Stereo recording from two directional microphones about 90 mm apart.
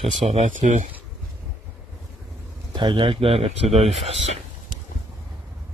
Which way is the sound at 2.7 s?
60° right (ahead or behind).